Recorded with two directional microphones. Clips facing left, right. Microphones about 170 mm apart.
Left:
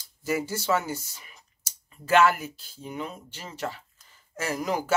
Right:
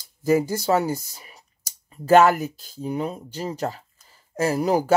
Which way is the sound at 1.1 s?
35° right (ahead or behind).